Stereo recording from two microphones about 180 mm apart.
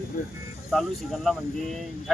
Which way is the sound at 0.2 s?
50° left (ahead or behind).